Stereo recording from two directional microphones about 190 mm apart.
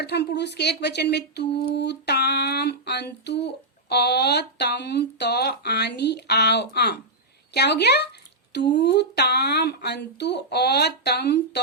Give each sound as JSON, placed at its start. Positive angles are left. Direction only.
{"t": 0.0, "sound": "speech", "side_deg": 60}